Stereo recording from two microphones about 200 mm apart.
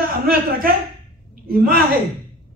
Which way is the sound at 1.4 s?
50° right (ahead or behind).